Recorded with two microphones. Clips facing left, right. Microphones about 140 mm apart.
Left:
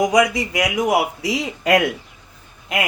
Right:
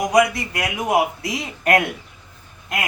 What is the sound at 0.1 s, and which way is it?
A man's voice, 90° left.